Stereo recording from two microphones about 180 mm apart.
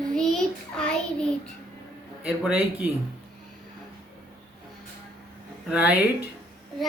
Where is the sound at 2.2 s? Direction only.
10° right (ahead or behind).